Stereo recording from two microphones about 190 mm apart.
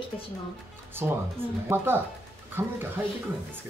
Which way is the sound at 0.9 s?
10° right (ahead or behind).